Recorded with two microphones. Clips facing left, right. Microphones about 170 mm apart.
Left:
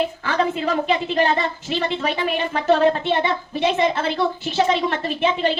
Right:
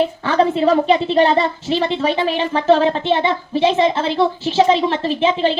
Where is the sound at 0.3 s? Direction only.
35° right (ahead or behind).